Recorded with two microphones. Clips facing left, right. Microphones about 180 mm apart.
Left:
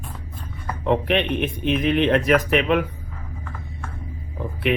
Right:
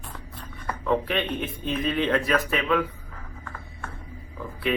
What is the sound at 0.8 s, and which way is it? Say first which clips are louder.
Speech: left 5 dB; 20° left (ahead or behind).